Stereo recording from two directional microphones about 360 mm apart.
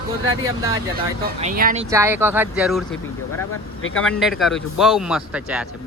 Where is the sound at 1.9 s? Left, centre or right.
Centre.